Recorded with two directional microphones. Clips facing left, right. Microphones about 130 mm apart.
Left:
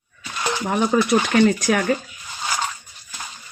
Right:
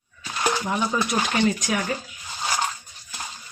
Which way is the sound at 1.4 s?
60° left (ahead or behind).